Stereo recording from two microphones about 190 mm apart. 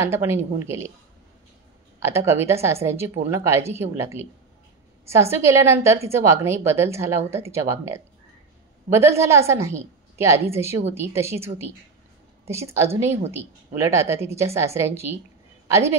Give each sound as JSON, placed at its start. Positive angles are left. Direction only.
{"t": 0.0, "sound": "speech", "side_deg": -15}
{"t": 2.0, "sound": "a woman's voice", "side_deg": -15}
{"t": 12.4, "sound": "speech", "side_deg": -15}